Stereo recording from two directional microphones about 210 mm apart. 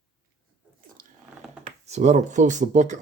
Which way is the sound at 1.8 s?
30° right (ahead or behind).